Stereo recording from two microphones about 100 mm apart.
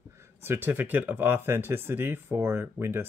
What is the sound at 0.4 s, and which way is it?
Speech, 20° right (ahead or behind).